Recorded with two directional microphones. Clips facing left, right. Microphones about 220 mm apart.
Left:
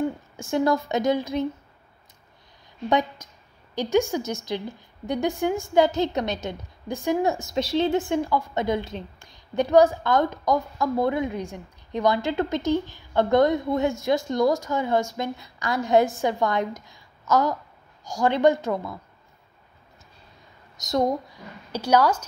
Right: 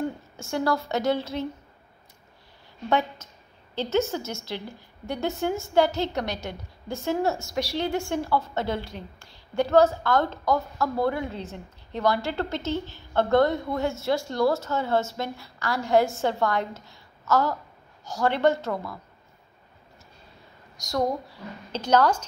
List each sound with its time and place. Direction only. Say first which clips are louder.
0.4 s a woman's voice: left 4 dB; 20° left (ahead or behind)
2.9 s a woman's voice: left 2 dB; 15° left (ahead or behind)
20.7 s a woman's voice: left 3 dB; 20° left (ahead or behind)
21.7 s a woman's voice: left 1 dB; 10° left (ahead or behind)